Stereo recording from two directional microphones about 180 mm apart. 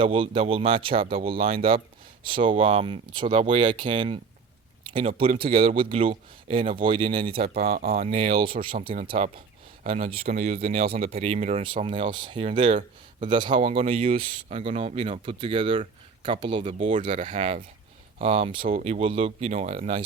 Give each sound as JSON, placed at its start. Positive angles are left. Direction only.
{"t": 0.0, "sound": "speech", "side_deg": -30}
{"t": 8.5, "sound": "speech", "side_deg": -55}
{"t": 9.0, "sound": "speech", "side_deg": -35}
{"t": 18.6, "sound": "speech", "side_deg": -50}
{"t": 18.9, "sound": "speech", "side_deg": -30}